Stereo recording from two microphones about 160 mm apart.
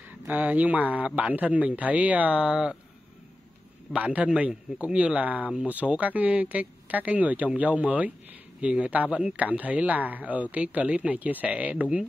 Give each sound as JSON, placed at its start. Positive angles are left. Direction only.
{"t": 0.2, "sound": "speech", "side_deg": -10}
{"t": 3.9, "sound": "speech", "side_deg": -10}